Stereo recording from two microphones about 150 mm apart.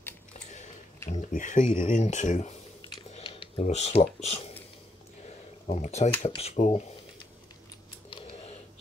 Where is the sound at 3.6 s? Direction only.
45° left (ahead or behind).